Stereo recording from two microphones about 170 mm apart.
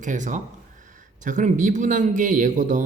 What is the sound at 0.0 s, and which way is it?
Speech, 45° right (ahead or behind).